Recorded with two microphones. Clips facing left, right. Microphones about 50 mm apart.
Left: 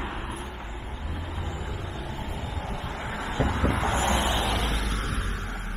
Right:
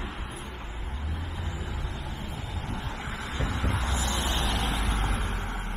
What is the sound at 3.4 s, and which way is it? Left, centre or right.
Vehicle, left.